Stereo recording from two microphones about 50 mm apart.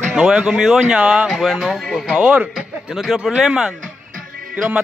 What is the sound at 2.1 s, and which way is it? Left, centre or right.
Speech, right.